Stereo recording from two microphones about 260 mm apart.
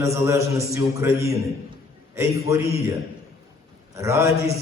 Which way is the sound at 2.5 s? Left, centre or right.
Centre.